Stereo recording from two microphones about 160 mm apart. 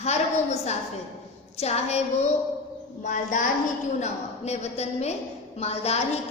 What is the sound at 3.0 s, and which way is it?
A woman's voice, 50° left (ahead or behind).